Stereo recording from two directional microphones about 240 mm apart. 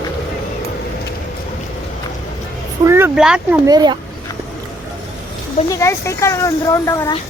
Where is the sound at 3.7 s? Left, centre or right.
Centre.